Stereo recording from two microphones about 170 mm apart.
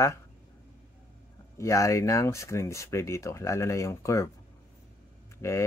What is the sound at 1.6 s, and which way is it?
Speech, 15° left (ahead or behind).